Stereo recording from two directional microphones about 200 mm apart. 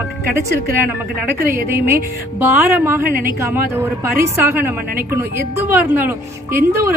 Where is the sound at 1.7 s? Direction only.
10° right (ahead or behind).